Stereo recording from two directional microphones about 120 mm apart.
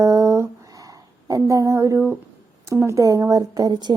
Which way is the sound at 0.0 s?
25° right (ahead or behind).